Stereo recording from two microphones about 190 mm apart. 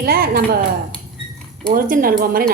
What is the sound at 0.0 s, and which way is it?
Speech, 50° right (ahead or behind).